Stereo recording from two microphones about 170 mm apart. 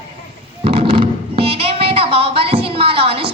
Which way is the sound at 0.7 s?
30° right (ahead or behind).